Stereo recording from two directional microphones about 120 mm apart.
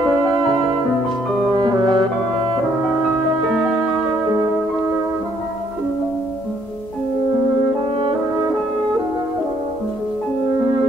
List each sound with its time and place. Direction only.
0.2 s music: 5° left (ahead or behind)
1.5 s music: 40° right (ahead or behind)